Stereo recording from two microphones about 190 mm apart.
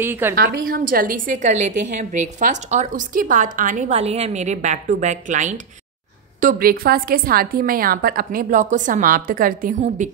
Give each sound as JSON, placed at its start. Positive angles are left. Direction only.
{"t": 0.0, "sound": "a woman's voice", "side_deg": -10}
{"t": 0.7, "sound": "a woman's voice", "side_deg": -50}
{"t": 6.4, "sound": "a woman's voice", "side_deg": -50}